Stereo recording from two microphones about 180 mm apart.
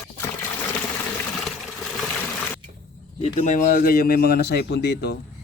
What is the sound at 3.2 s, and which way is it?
Speech, 40° left (ahead or behind).